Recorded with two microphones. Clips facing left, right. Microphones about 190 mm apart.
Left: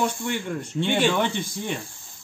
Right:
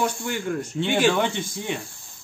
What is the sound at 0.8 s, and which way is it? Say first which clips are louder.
Speech: right 1 dB; 10° right (ahead or behind).